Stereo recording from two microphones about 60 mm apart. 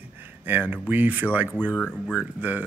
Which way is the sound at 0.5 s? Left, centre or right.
Right.